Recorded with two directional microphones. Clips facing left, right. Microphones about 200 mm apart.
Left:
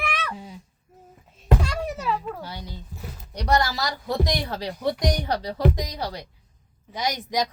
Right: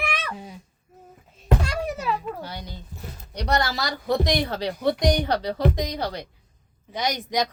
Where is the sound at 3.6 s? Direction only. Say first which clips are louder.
Even; 60° right (ahead or behind).